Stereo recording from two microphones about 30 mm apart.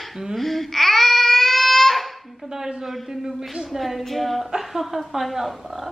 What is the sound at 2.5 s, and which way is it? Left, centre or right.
Speech, centre.